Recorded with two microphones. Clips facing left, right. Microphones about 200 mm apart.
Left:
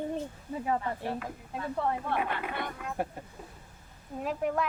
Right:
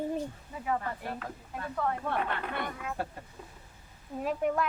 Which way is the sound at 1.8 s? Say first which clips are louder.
Even; 30° left (ahead or behind).